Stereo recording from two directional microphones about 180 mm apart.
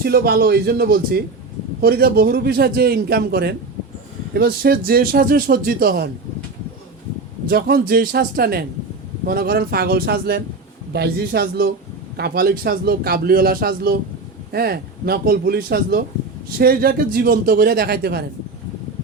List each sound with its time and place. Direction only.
0.0 s a man's voice: 60° right (ahead or behind)
7.4 s a man's voice: 55° right (ahead or behind)